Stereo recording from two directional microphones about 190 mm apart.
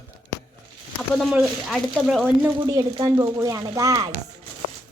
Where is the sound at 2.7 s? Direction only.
20° right (ahead or behind).